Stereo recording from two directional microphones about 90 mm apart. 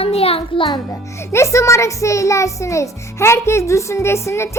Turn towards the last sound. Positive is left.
turn(degrees=30)  # may be behind; listen again after turning